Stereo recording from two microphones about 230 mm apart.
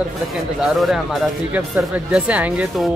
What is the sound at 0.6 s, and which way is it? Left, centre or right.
Speech, centre.